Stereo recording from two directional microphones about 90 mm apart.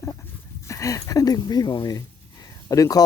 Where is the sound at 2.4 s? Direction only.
40° left (ahead or behind).